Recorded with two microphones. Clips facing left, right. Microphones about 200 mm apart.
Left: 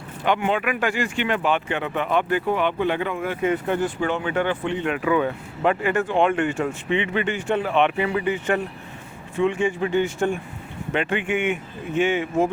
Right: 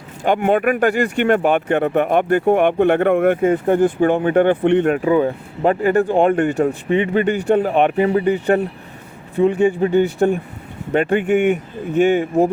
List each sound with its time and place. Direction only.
0.3 s speech: 50° right (ahead or behind)
1.0 s speech: 55° right (ahead or behind)
3.5 s speech: 50° right (ahead or behind)
4.9 s speech: 35° right (ahead or behind)